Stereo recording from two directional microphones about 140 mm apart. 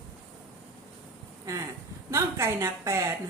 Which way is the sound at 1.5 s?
20° right (ahead or behind).